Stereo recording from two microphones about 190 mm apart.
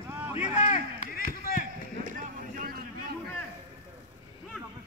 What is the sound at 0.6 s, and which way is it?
Run, 40° left (ahead or behind).